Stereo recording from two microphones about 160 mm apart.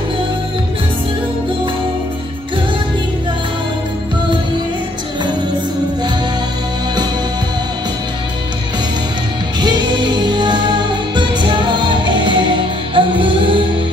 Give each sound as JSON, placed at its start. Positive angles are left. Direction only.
{"t": 9.6, "sound": "music", "side_deg": -30}